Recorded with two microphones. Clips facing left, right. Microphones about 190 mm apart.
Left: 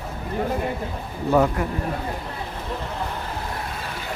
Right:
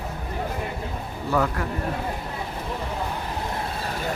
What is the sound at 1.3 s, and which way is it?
Speech, 20° left (ahead or behind).